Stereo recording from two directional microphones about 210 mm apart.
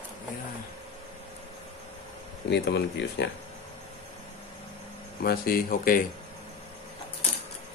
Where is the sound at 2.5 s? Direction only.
55° left (ahead or behind).